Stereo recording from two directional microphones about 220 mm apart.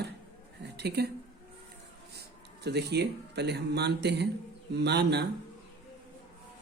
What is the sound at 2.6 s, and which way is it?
Speech, 50° right (ahead or behind).